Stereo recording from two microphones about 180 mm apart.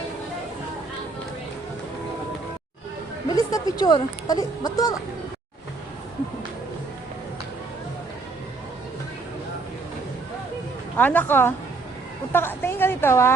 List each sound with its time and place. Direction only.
3.2 s speech: 20° left (ahead or behind)
10.9 s a woman's voice: 10° left (ahead or behind)